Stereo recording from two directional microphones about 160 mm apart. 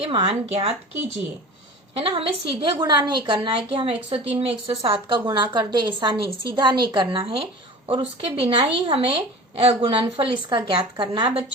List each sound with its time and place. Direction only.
0.0 s a woman's voice: 35° right (ahead or behind)
2.0 s a woman's voice: 35° right (ahead or behind)